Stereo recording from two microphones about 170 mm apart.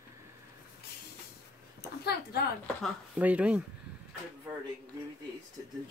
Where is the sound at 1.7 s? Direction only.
70° left (ahead or behind).